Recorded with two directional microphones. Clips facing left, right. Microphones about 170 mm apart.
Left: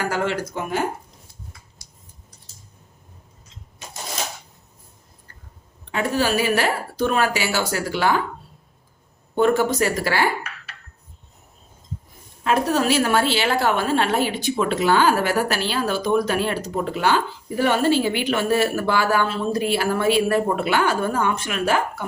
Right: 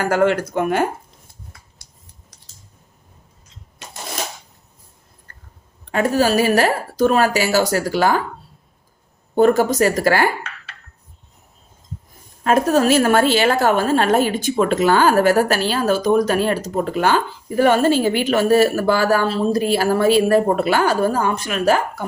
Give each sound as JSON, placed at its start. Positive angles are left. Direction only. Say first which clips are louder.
{"t": 0.0, "sound": "speech", "louder": "right 7 dB", "side_deg": -55}
{"t": 5.9, "sound": "a woman's voice", "louder": "right 5 dB", "side_deg": -45}
{"t": 9.3, "sound": "a woman's voice", "louder": "right 4 dB", "side_deg": -40}
{"t": 12.4, "sound": "a woman's voice", "louder": "right 5 dB", "side_deg": -45}